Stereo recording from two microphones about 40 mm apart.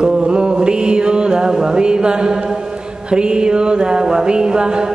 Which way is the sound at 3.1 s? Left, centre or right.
Right.